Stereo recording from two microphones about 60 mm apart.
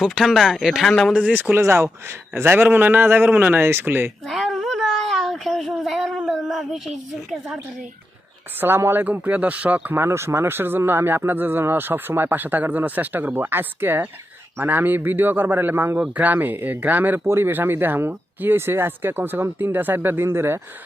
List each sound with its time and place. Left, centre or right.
0.0 s a woman's voice: centre
0.9 s speech: centre
1.1 s speech: right
1.6 s speech: right
4.3 s a sound: centre
6.5 s a woman's voice: centre
8.6 s speech: right
9.0 s speech: right
9.9 s speech: right
17.2 s speech: right